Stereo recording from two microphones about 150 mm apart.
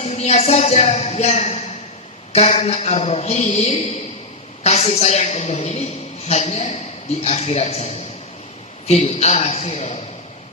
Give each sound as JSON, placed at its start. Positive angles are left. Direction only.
{"t": 0.0, "sound": "a man's voice", "side_deg": 50}